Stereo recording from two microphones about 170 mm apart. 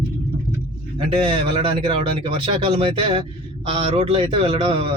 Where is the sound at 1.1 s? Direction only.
35° right (ahead or behind).